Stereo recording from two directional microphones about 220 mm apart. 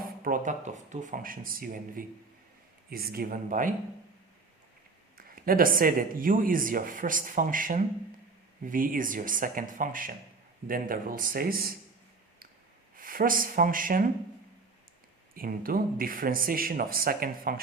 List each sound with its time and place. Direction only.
0.3 s speech: 35° right (ahead or behind)
5.1 s speech: 40° right (ahead or behind)
13.0 s speech: 40° right (ahead or behind)
15.4 s speech: 40° right (ahead or behind)